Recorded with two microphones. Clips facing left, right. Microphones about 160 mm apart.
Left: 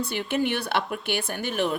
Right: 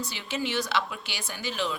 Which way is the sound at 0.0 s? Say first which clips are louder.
Left 7 dB; 55° left (ahead or behind).